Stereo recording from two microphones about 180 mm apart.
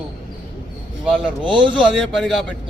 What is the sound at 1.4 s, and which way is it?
Speech, 25° right (ahead or behind).